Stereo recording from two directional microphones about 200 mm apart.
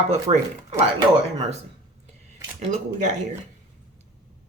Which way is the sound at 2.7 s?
35° right (ahead or behind).